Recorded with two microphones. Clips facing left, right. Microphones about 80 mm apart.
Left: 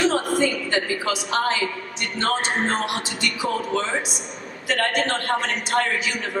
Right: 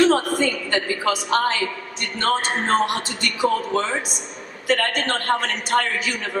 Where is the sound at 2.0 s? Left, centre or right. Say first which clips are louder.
Right 2 dB; right.